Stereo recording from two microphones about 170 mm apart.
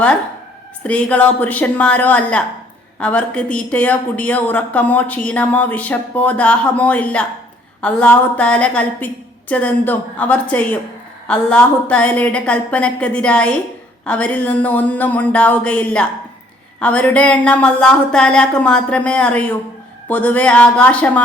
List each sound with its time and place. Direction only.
0.9 s speech: 5° left (ahead or behind)